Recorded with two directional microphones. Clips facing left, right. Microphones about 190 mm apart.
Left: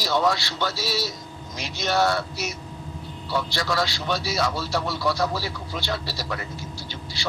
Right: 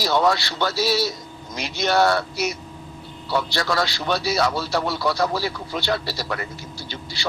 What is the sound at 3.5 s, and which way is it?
A man's voice, 65° right (ahead or behind).